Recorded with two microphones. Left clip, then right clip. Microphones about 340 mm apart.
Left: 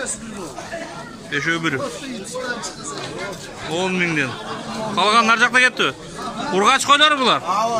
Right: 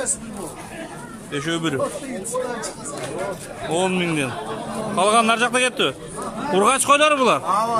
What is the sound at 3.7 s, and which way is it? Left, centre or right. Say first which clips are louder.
Speech: left 1 dB; centre.